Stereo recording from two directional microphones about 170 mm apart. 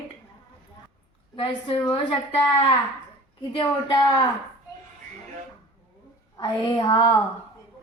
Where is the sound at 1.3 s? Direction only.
30° left (ahead or behind).